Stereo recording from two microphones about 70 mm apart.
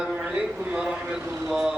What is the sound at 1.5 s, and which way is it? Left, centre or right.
Vehicle, centre.